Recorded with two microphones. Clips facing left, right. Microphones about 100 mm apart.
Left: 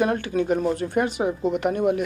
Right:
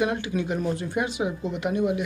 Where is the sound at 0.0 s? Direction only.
40° left (ahead or behind).